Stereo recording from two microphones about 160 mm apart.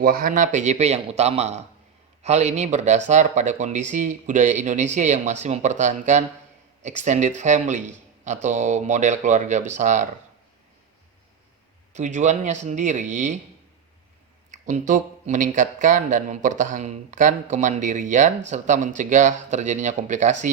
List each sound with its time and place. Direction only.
0.0 s speech: 60° right (ahead or behind)
11.9 s speech: 50° right (ahead or behind)
14.5 s speech: 50° right (ahead or behind)